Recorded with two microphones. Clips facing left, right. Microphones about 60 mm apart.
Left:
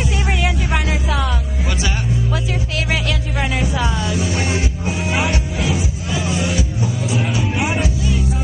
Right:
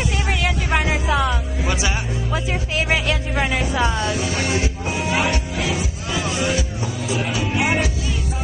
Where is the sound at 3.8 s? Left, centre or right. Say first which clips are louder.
Right 1 dB; centre.